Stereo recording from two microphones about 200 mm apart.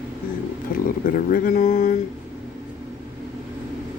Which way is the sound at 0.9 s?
45° left (ahead or behind).